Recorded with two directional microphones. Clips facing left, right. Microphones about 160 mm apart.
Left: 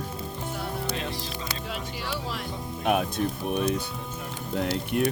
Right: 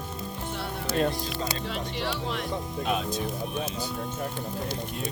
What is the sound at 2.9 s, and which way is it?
Speech, 60° left (ahead or behind).